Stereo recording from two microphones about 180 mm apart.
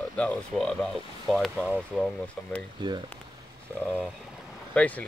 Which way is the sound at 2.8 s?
25° right (ahead or behind).